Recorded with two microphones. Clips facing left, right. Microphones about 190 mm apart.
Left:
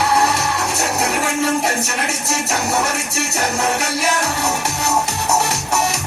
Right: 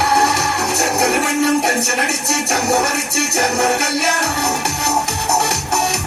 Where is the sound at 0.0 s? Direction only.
65° right (ahead or behind).